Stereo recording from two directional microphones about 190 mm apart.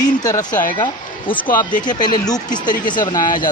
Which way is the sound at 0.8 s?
25° left (ahead or behind).